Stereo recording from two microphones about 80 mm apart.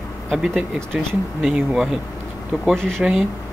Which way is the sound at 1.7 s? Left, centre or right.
Centre.